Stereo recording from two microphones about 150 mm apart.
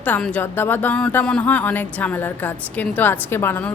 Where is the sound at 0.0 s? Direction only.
10° left (ahead or behind).